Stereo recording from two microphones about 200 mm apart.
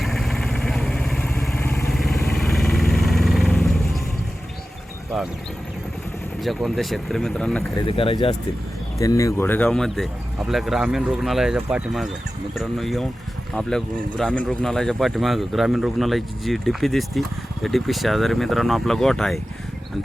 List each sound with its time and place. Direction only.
0.0 s vehicle: centre (ahead or behind)
1.5 s vehicle: 15° left (ahead or behind)
1.9 s vehicle: centre (ahead or behind)
6.4 s speech: centre (ahead or behind)
7.9 s speech: 25° left (ahead or behind)
9.0 s speech: 15° left (ahead or behind)